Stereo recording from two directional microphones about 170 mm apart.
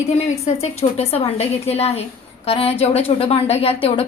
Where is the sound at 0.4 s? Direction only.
35° left (ahead or behind).